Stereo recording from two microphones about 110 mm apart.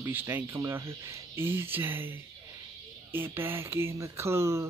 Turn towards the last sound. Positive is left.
turn(degrees=-25)  # may be behind; listen again after turning